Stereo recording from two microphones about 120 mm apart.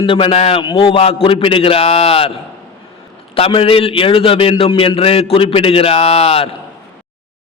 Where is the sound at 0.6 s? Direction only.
45° left (ahead or behind).